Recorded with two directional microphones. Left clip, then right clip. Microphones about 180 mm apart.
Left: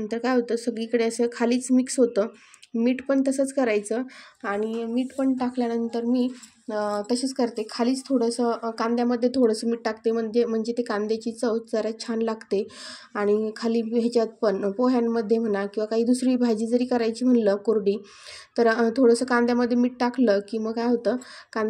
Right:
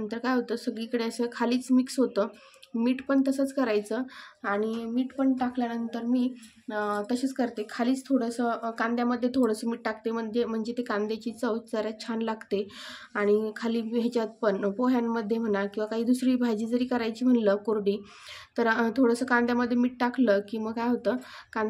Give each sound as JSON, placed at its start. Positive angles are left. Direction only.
{"t": 0.1, "sound": "a woman's voice", "side_deg": 20}